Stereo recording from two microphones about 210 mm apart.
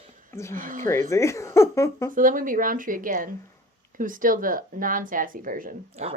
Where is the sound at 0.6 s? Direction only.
40° right (ahead or behind).